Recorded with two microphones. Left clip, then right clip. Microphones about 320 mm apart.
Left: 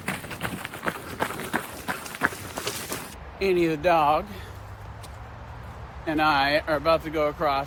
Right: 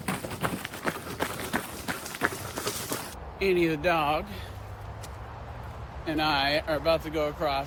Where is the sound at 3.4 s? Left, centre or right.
Centre.